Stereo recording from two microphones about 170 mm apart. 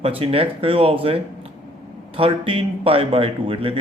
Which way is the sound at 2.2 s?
30° right (ahead or behind).